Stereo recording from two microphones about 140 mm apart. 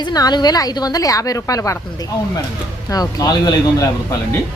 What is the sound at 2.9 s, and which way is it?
A woman's voice, 25° left (ahead or behind).